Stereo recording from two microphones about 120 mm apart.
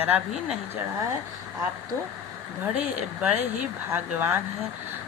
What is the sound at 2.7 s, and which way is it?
Speech, 10° right (ahead or behind).